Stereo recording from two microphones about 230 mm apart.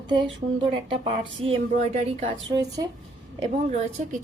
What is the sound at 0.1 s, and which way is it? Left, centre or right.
A woman's voice, right.